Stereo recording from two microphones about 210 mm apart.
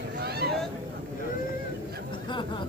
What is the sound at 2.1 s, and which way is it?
Chatter, 20° left (ahead or behind).